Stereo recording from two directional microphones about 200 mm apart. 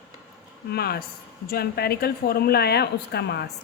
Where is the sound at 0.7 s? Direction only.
50° left (ahead or behind).